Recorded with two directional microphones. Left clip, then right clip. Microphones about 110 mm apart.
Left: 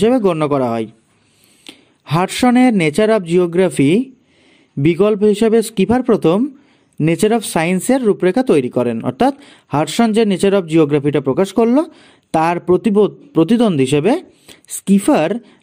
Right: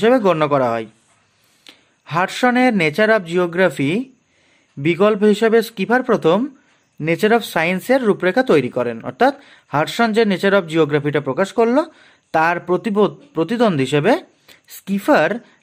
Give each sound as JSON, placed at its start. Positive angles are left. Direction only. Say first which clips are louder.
{"t": 0.0, "sound": "speech", "louder": "even", "side_deg": 30}